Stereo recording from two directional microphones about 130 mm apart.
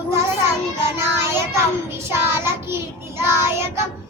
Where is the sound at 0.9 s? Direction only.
20° right (ahead or behind).